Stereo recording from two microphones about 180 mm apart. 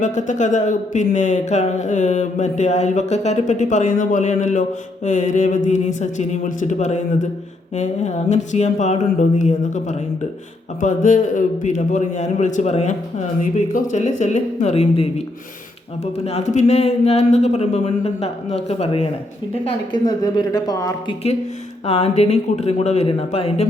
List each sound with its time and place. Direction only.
0.0 s speech: 40° left (ahead or behind)
16.1 s speech: 35° left (ahead or behind); by 21.2 s 20° left (ahead or behind)
21.8 s speech: 35° left (ahead or behind)